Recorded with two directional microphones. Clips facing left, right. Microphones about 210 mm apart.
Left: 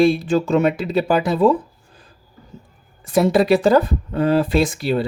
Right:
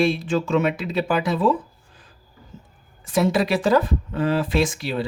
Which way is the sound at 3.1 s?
40° left (ahead or behind).